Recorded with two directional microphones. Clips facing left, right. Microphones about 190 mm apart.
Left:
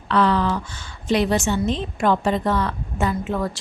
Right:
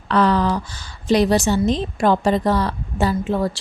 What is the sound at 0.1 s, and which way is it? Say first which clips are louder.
A woman's voice: right 2 dB; 40° right (ahead or behind).